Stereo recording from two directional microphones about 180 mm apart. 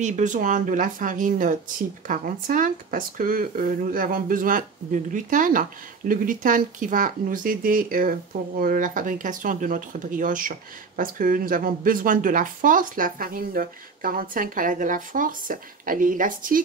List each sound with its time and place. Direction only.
0.0 s speech: 45° right (ahead or behind)